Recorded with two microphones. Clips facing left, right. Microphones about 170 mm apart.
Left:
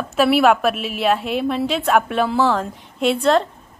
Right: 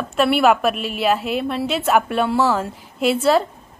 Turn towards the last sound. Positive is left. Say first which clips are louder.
# even
turn(degrees=-5)  # may be behind; listen again after turning